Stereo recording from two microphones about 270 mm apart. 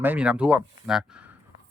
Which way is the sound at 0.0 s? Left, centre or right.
Centre.